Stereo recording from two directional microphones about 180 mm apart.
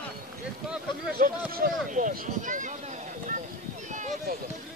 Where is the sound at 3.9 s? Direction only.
45° right (ahead or behind).